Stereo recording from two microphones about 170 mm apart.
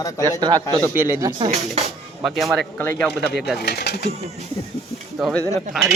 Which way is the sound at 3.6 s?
75° left (ahead or behind).